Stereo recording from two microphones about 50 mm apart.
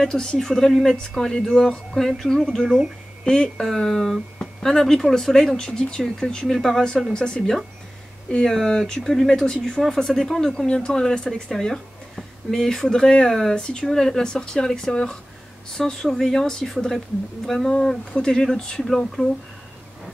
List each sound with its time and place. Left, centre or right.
0.0 s speech: centre
8.3 s speech: centre
10.0 s speech: centre